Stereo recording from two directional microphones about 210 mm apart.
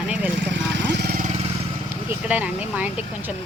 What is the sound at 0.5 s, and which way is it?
Lawn mower, 50° right (ahead or behind).